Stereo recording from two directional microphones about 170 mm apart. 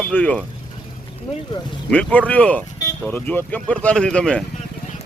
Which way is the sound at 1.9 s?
5° left (ahead or behind).